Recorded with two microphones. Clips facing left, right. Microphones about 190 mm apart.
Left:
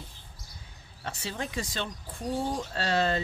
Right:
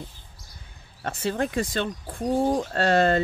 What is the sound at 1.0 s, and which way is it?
Speech, 55° right (ahead or behind).